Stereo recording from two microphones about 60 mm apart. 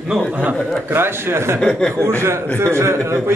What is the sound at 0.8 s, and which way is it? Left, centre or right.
Speech, right.